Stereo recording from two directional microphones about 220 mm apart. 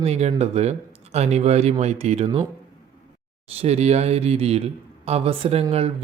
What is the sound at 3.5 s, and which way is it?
Speech, 30° right (ahead or behind).